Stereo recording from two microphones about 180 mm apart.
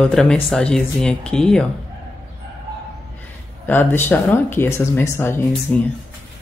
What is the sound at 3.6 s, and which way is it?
Speech, 10° left (ahead or behind).